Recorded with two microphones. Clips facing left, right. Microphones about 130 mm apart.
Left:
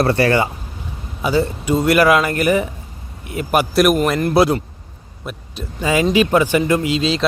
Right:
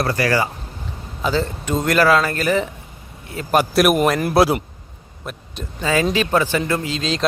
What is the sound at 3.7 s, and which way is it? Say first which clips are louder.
Speech: left 2 dB; 5° right (ahead or behind).